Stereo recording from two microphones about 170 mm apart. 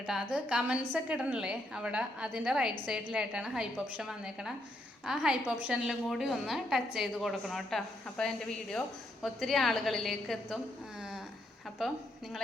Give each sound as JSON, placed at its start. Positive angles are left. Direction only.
{"t": 0.0, "sound": "a woman's voice", "side_deg": -5}